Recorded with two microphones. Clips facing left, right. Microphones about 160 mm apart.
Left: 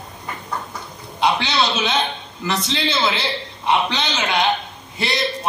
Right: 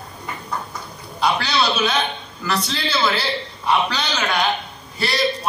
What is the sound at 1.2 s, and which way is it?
A man's voice, 20° left (ahead or behind).